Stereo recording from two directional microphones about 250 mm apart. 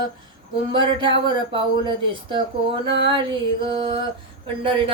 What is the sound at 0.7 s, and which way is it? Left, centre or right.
Speech, centre.